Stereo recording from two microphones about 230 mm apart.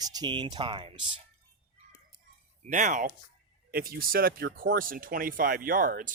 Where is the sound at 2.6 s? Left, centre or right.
Right.